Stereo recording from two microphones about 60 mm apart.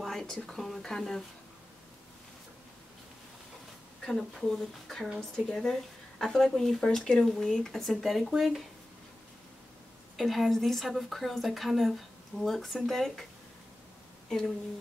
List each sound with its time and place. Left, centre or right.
0.0 s speech: centre
4.0 s a woman's voice: centre
10.1 s a woman's voice: centre